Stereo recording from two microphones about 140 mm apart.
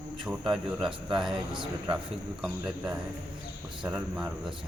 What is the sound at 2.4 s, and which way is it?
A man's voice, 5° right (ahead or behind).